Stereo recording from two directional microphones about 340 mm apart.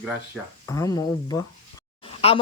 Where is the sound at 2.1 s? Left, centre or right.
Centre.